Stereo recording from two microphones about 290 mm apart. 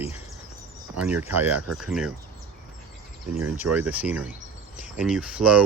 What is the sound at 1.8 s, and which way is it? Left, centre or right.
Speech, centre.